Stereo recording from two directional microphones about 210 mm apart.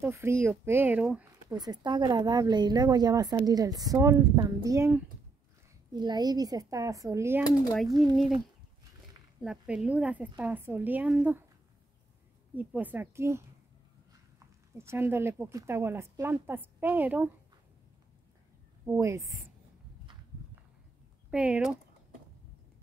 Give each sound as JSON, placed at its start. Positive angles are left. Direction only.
{"t": 0.0, "sound": "a woman's voice", "side_deg": -10}
{"t": 1.6, "sound": "a woman's voice", "side_deg": -20}
{"t": 9.4, "sound": "a woman's voice", "side_deg": -5}
{"t": 12.5, "sound": "a woman's voice", "side_deg": -10}
{"t": 14.8, "sound": "a woman's voice", "side_deg": -10}
{"t": 18.9, "sound": "a woman's voice", "side_deg": -15}
{"t": 21.3, "sound": "speech", "side_deg": -5}